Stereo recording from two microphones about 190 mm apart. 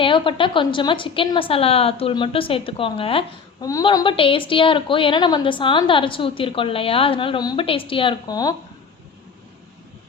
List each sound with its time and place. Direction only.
0.0 s a woman's voice: 25° left (ahead or behind)
3.7 s a woman's voice: 20° left (ahead or behind)